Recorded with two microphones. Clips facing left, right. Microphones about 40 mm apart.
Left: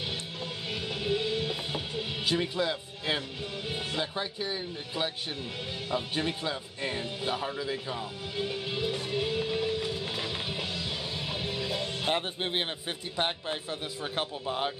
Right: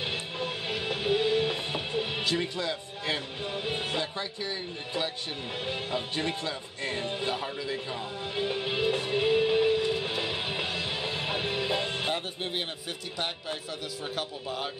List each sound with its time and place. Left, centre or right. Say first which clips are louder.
0.1 s music: right 4 dB; right
2.3 s speech: left 1 dB; centre
3.6 s music: right 3 dB; right
4.0 s speech: left 1 dB; centre
6.4 s speech: left 1 dB; centre
8.4 s music: right 3 dB; right
14.1 s speech: left 3 dB; left